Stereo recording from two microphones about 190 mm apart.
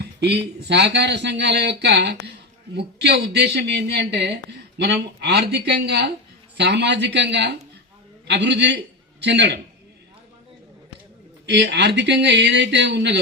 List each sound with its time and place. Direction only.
0.0 s a sound: 60° right (ahead or behind)
0.7 s a woman's voice: 65° right (ahead or behind)
11.4 s a woman's voice: 65° right (ahead or behind)